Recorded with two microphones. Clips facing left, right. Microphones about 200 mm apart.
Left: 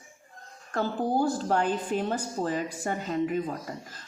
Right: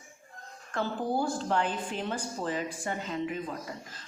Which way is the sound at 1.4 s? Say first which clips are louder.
Left 3 dB; 40° left (ahead or behind).